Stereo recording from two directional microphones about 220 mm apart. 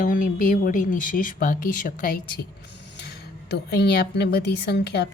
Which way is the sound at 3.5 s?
45° left (ahead or behind).